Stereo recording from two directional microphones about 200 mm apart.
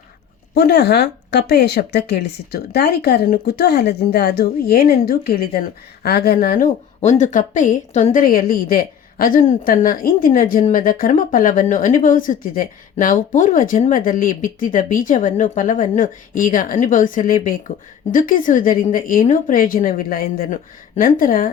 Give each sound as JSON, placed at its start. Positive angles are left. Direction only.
{"t": 0.5, "sound": "speech", "side_deg": 55}